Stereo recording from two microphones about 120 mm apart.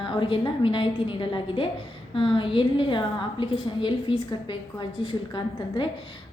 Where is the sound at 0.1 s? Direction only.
45° left (ahead or behind).